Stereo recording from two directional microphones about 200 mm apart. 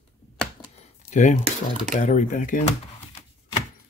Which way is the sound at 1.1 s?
35° left (ahead or behind).